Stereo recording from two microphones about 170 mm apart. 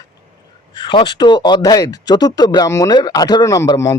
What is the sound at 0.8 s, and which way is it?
A man's voice, 30° left (ahead or behind).